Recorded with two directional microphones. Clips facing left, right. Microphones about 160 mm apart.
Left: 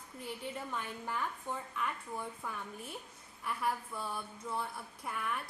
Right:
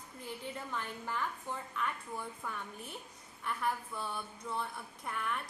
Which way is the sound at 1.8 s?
5° left (ahead or behind).